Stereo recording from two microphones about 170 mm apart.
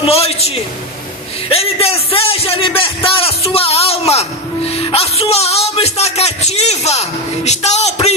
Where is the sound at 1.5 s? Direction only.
35° left (ahead or behind).